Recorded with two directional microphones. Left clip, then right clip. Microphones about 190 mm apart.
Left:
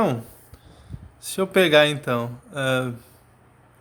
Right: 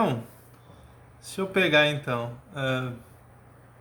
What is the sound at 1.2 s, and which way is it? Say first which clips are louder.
A man's voice: left 6 dB; 55° left (ahead or behind).